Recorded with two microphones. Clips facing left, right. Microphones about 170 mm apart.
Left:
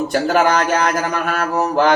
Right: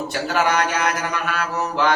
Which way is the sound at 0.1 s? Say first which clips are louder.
Left 5 dB; 50° left (ahead or behind).